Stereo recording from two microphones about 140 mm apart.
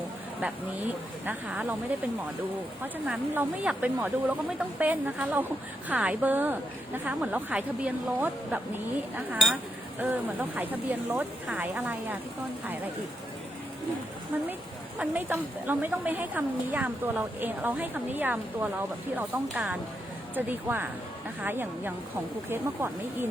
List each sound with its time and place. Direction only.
0.4 s a woman's voice: 15° right (ahead or behind)
2.8 s a woman's voice: 10° right (ahead or behind)
14.9 s a woman's voice: 10° right (ahead or behind)